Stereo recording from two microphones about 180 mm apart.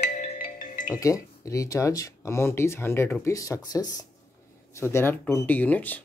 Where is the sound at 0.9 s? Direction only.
20° left (ahead or behind).